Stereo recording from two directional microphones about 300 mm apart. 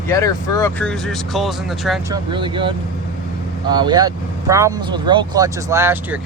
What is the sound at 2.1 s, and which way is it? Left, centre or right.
Speech, centre.